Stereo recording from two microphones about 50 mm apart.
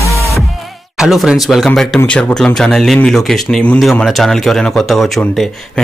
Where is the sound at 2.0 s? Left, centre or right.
Left.